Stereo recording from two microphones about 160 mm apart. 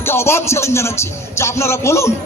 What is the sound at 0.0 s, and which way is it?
Music, 15° left (ahead or behind).